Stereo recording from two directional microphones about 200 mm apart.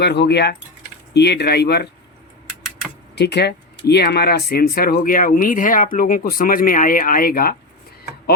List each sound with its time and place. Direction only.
0.0 s speech: 55° left (ahead or behind)
3.2 s speech: 55° left (ahead or behind)